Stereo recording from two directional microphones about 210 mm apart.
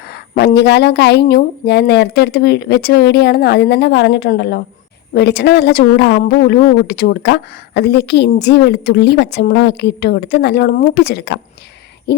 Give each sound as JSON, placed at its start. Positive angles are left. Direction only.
{"t": 0.1, "sound": "a woman's voice", "side_deg": 50}